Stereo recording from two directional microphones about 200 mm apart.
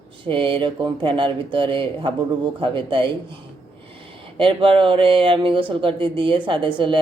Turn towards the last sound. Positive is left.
turn(degrees=-25)  # may be behind; listen again after turning